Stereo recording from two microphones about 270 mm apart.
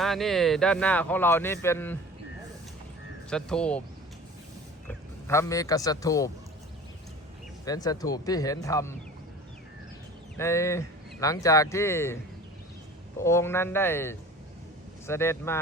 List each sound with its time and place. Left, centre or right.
0.0 s speech: centre
3.2 s speech: centre
4.9 s speech: centre
7.6 s speech: centre
10.3 s speech: centre
13.1 s speech: centre